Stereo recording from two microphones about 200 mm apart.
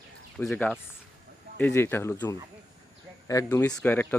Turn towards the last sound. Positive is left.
turn(degrees=5)  # may be behind; listen again after turning